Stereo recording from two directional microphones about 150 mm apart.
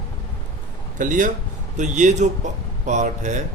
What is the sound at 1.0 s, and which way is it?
A man's voice, 60° right (ahead or behind).